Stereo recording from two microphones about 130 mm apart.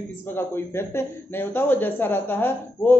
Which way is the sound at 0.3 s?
15° left (ahead or behind).